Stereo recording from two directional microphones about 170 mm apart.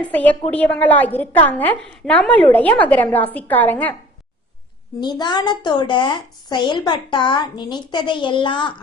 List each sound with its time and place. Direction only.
0.0 s a woman's voice: 10° left (ahead or behind)
4.9 s a woman's voice: 25° left (ahead or behind)